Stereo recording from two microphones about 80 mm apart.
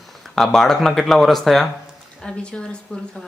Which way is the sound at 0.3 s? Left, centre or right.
Centre.